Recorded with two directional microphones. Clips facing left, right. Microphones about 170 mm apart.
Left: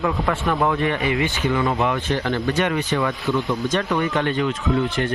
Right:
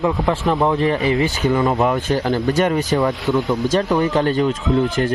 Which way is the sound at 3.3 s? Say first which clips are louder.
Right 3 dB; 20° right (ahead or behind).